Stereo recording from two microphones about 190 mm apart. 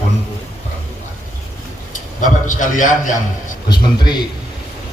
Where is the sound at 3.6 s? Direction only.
20° left (ahead or behind).